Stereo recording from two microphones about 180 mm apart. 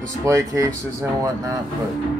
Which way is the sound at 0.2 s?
15° right (ahead or behind).